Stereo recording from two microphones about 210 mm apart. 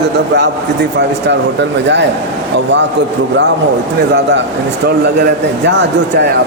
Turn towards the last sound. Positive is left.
turn(degrees=-55)  # may be behind; listen again after turning